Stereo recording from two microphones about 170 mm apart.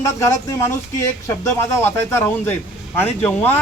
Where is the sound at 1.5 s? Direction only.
15° left (ahead or behind).